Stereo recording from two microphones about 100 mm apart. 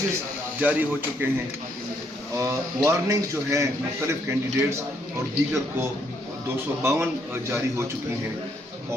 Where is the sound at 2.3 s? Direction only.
30° right (ahead or behind).